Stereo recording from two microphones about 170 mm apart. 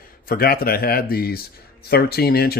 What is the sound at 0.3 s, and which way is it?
Speech, 60° left (ahead or behind).